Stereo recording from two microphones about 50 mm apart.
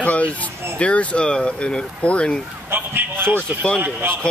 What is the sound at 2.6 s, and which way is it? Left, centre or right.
A man's voice, right.